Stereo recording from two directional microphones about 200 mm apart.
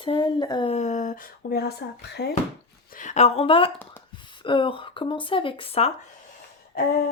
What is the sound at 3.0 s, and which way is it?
Speech, 35° left (ahead or behind).